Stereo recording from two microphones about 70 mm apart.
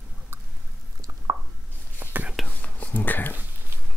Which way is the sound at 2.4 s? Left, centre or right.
Left.